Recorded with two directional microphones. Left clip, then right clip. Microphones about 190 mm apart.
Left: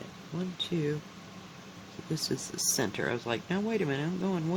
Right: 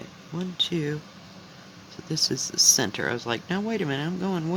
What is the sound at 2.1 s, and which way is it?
Speech, 25° right (ahead or behind).